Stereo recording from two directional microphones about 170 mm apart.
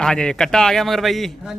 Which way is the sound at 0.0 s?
5° left (ahead or behind).